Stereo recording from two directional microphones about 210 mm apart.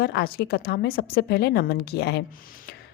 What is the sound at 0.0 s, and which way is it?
A woman's voice, 50° left (ahead or behind).